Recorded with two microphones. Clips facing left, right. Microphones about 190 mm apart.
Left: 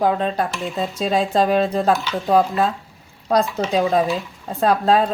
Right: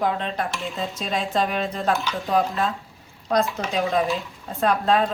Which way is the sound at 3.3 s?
35° left (ahead or behind).